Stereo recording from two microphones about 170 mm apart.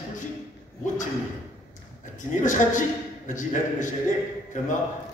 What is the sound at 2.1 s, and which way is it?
A man's voice, 50° left (ahead or behind).